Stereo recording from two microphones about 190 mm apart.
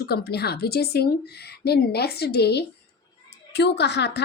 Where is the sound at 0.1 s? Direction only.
55° left (ahead or behind).